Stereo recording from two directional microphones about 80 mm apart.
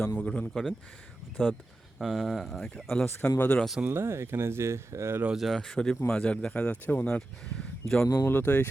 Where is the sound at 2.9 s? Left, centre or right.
Centre.